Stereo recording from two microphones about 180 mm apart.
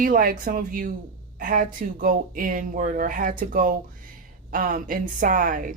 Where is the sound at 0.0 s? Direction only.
50° right (ahead or behind).